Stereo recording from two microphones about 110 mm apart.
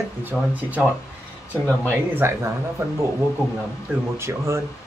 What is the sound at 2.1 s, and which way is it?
Speech, 20° right (ahead or behind).